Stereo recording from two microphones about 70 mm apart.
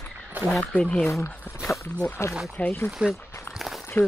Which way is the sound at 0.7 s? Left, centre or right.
Left.